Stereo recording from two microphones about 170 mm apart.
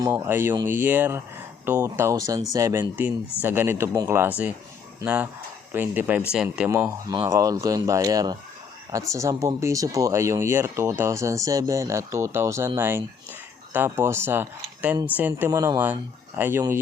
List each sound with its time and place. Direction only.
0.1 s speech: 10° right (ahead or behind)